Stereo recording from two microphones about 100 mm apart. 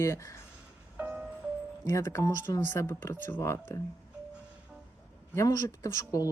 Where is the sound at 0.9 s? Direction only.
15° right (ahead or behind).